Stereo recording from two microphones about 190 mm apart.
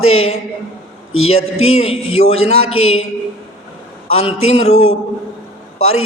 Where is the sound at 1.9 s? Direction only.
30° left (ahead or behind).